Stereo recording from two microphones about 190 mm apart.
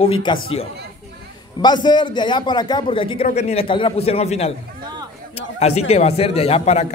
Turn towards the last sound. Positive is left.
turn(degrees=35)  # may be behind; listen again after turning